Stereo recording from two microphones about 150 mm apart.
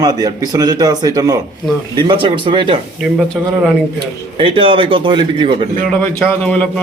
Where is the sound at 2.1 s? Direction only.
35° right (ahead or behind).